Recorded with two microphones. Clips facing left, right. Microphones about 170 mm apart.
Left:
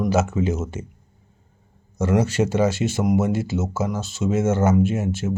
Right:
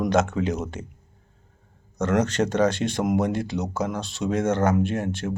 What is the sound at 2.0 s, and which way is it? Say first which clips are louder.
Speech: left 2 dB; 10° left (ahead or behind).